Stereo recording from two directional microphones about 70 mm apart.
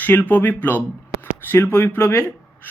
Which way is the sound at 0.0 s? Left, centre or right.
Left.